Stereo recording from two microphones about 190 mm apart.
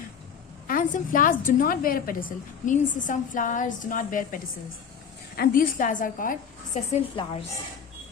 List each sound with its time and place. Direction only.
0.7 s a woman's voice: 45° left (ahead or behind)
5.4 s a woman's voice: 45° left (ahead or behind)
6.9 s a woman's voice: 30° left (ahead or behind)